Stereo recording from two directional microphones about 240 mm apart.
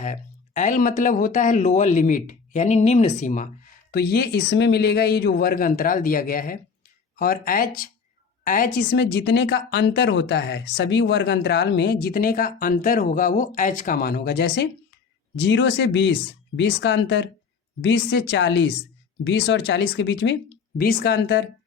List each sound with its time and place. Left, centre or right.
0.0 s speech: left
3.9 s speech: left